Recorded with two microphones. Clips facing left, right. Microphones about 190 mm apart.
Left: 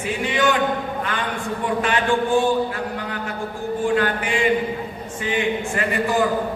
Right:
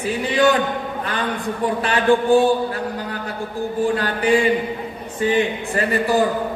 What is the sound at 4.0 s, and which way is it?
A man's voice, 35° right (ahead or behind).